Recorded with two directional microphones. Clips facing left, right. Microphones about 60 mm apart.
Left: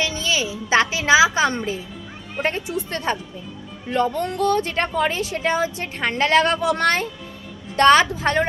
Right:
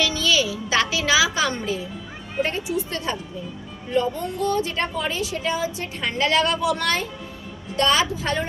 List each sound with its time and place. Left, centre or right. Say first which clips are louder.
0.0 s music: right 2 dB; left
2.4 s a woman's voice: even; left
3.9 s a woman's voice: left 2 dB; left